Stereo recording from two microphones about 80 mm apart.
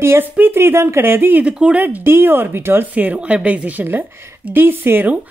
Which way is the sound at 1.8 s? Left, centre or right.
Right.